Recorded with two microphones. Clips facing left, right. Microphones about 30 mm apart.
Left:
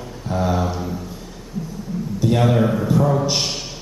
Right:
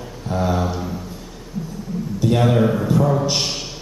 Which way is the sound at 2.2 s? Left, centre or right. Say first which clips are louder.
Right 1 dB; centre.